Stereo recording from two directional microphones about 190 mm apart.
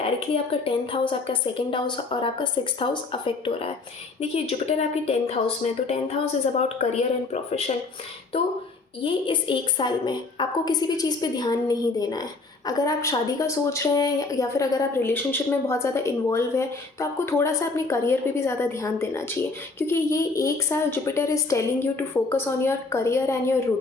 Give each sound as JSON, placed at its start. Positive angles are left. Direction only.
{"t": 0.0, "sound": "a woman's voice", "side_deg": 30}
{"t": 9.0, "sound": "a woman's voice", "side_deg": 25}